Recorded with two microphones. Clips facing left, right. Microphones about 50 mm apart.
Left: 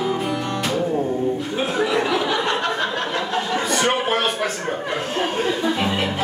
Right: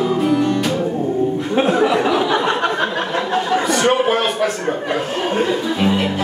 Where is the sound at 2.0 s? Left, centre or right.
Centre.